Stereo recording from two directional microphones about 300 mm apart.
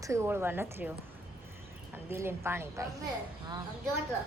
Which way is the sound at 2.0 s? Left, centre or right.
Centre.